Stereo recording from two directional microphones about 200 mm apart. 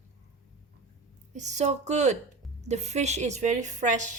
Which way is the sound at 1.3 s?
35° right (ahead or behind).